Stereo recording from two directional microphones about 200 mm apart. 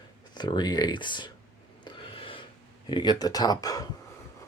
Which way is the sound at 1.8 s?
25° left (ahead or behind).